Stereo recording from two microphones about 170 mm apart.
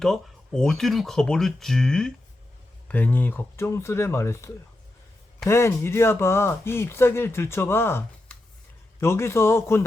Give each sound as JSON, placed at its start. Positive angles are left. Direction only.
{"t": 0.0, "sound": "speech", "side_deg": 5}